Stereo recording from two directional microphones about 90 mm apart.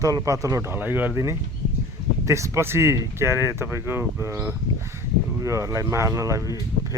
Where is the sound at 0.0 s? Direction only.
40° right (ahead or behind).